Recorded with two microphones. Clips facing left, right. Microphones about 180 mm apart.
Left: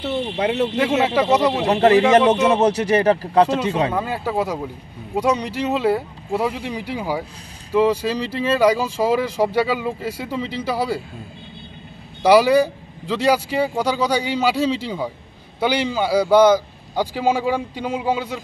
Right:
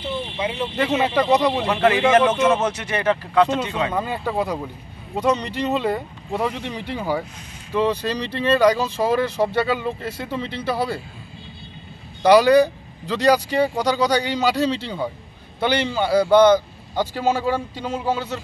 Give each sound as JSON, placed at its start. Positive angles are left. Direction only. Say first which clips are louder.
{"t": 0.0, "sound": "a sound", "louder": "left 4 dB", "side_deg": 70}
{"t": 0.7, "sound": "speech", "louder": "right 2 dB", "side_deg": 10}
{"t": 1.7, "sound": "speech", "louder": "left 4 dB", "side_deg": 40}
{"t": 3.9, "sound": "speech", "louder": "left 1 dB", "side_deg": 5}
{"t": 12.2, "sound": "speech", "louder": "even", "side_deg": 5}